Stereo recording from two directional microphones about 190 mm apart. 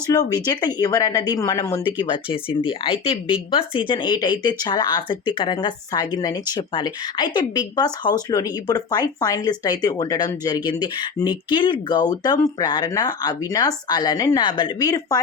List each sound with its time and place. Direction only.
0.1 s speech: 20° left (ahead or behind)